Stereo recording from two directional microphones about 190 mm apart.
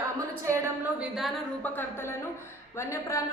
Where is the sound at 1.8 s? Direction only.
10° left (ahead or behind).